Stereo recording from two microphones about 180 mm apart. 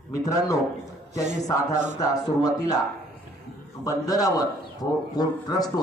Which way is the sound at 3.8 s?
20° left (ahead or behind).